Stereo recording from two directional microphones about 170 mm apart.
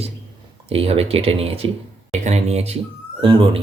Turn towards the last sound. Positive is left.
turn(degrees=-30)  # may be behind; listen again after turning